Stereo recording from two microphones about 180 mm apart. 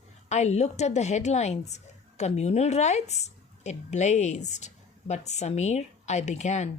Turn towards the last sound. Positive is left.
turn(degrees=40)  # may be behind; listen again after turning